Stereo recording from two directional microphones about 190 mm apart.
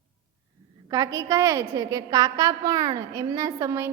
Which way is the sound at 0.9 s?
15° right (ahead or behind).